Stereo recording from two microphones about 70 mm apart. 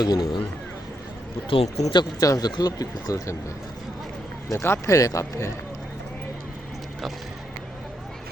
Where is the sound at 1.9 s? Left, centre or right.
Left.